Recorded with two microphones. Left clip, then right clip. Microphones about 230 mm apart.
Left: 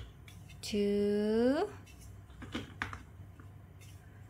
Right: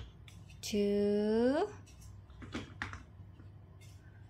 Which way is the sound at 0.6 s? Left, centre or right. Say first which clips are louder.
Even; centre.